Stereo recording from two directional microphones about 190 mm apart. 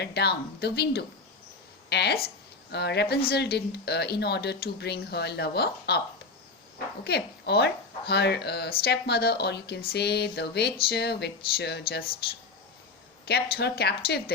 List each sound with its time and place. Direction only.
0.0 s speech: 60° left (ahead or behind)
7.0 s speech: 60° left (ahead or behind)
13.2 s speech: 60° left (ahead or behind)